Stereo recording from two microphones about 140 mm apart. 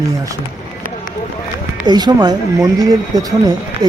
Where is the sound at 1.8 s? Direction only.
30° right (ahead or behind).